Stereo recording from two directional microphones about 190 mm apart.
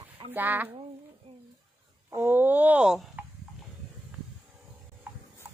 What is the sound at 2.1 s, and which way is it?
Speech, 10° right (ahead or behind).